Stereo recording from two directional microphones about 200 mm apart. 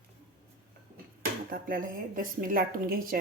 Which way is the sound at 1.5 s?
45° right (ahead or behind).